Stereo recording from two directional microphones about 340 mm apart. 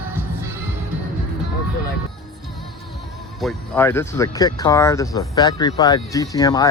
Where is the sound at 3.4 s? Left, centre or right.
Centre.